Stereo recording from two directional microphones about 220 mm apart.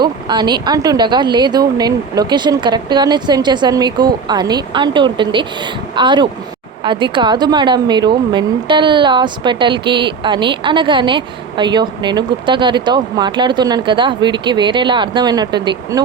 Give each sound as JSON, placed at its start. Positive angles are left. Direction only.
{"t": 0.0, "sound": "a woman's voice", "side_deg": -20}